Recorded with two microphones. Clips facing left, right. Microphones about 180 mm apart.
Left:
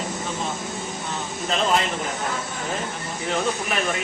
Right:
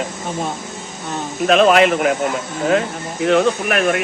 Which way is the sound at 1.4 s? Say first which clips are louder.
Right 11 dB; 75° right (ahead or behind).